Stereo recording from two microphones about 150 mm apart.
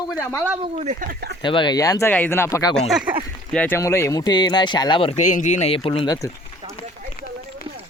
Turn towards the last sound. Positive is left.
turn(degrees=35)  # may be behind; listen again after turning